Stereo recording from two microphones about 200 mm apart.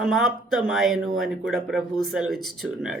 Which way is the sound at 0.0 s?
Centre (ahead or behind).